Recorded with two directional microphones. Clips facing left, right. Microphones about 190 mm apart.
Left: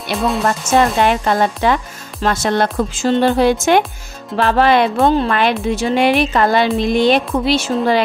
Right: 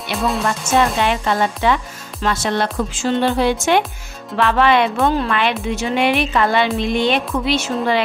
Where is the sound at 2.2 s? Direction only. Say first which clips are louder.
Left 3 dB; 45° left (ahead or behind).